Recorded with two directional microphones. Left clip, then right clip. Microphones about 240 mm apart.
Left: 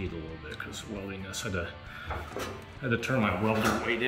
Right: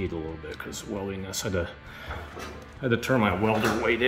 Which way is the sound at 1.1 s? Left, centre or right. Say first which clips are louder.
Right 3 dB; centre.